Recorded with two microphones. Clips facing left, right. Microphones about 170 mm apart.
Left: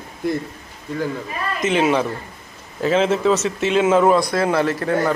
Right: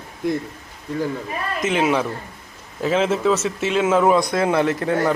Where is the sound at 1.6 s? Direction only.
5° right (ahead or behind).